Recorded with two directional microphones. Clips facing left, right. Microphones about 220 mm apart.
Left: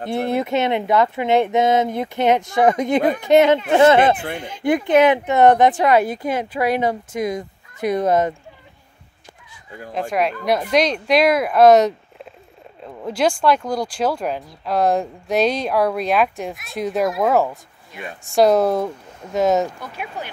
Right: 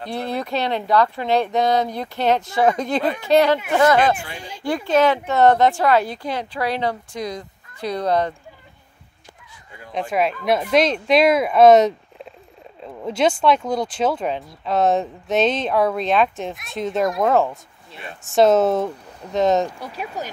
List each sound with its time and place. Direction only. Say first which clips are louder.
0.0 s speech: left 5 dB; 20° left (ahead or behind)
9.9 s speech: even; centre (ahead or behind)
13.7 s speech: even; 5° left (ahead or behind)
19.8 s speech: right 1 dB; 35° right (ahead or behind)